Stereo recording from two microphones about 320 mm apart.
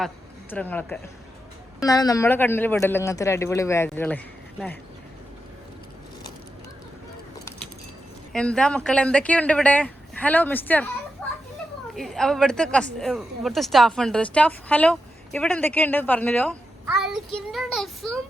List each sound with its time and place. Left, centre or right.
0.5 s speech: centre
7.3 s a sound: centre
8.3 s speech: centre
11.2 s children playing: centre
11.9 s speech: centre
17.0 s child singing: centre